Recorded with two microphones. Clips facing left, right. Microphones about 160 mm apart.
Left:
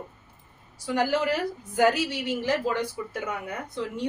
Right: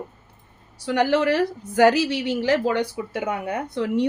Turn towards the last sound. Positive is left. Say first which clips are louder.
# right 9 dB
turn(degrees=-70)  # may be behind; listen again after turning